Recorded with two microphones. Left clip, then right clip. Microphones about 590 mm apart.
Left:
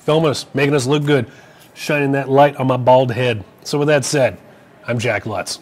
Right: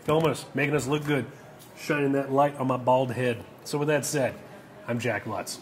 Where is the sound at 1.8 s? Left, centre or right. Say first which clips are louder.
Left 8 dB; left.